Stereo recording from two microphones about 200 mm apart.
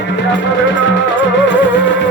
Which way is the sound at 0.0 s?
65° left (ahead or behind).